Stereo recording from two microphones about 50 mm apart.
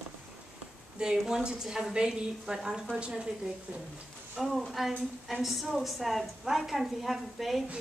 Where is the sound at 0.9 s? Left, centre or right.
Centre.